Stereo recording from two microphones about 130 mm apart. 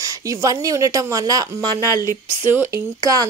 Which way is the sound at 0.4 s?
25° right (ahead or behind).